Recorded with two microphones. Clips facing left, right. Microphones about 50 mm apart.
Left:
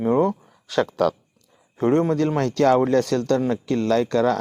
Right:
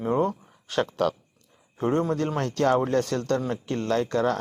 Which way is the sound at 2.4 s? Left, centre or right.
Left.